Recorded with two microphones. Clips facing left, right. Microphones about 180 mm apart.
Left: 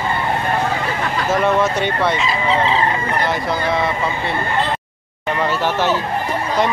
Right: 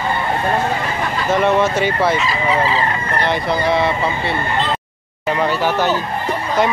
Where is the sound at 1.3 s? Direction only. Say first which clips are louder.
Right 2 dB; centre (ahead or behind).